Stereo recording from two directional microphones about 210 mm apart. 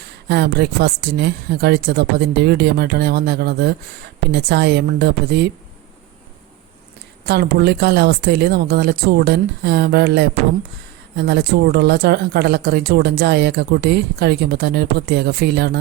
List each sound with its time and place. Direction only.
0.3 s speech: 50° right (ahead or behind)
7.3 s speech: 50° right (ahead or behind)